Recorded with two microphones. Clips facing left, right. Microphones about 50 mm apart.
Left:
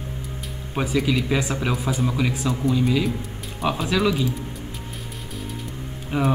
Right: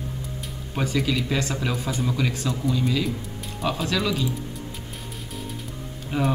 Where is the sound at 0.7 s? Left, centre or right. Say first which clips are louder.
Left 3 dB; centre.